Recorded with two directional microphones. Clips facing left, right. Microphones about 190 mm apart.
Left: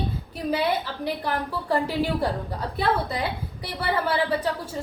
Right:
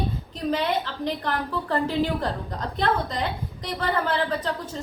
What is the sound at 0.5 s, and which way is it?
A woman's voice, 10° left (ahead or behind).